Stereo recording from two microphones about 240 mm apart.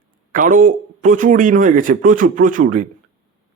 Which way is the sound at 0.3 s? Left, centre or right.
Right.